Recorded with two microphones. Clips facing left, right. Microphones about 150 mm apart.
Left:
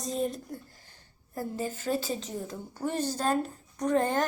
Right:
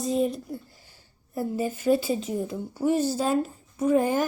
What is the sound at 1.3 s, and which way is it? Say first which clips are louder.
Speech: right 5 dB; 10° right (ahead or behind).